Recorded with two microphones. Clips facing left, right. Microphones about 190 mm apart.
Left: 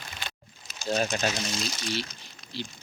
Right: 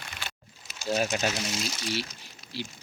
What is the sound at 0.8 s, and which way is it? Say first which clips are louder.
Speech: even; 5° right (ahead or behind).